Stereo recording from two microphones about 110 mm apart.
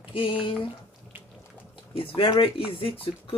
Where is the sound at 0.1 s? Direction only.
55° left (ahead or behind).